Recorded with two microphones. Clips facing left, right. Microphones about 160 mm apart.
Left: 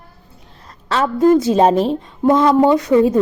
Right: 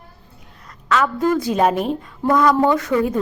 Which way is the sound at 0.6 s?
30° left (ahead or behind).